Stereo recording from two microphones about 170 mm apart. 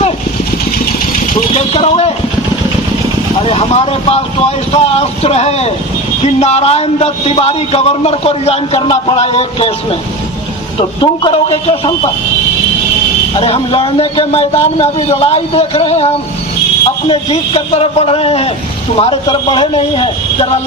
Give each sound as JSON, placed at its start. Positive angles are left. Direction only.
{"t": 1.4, "sound": "a sound", "side_deg": 40}
{"t": 3.4, "sound": "a man's voice", "side_deg": 35}
{"t": 11.0, "sound": "a man's voice", "side_deg": 30}
{"t": 13.3, "sound": "a man's voice", "side_deg": 35}